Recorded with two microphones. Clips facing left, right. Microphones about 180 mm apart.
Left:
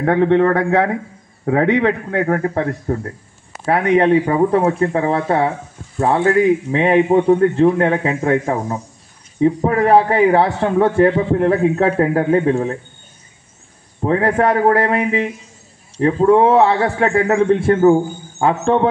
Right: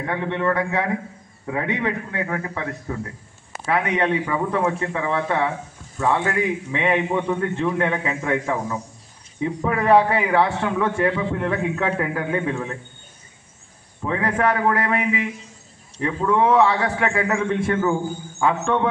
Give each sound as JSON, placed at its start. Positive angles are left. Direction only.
{"t": 0.0, "sound": "a man's voice", "side_deg": 80}
{"t": 14.0, "sound": "a man's voice", "side_deg": 35}